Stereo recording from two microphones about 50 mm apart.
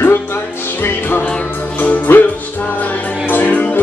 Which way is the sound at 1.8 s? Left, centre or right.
Left.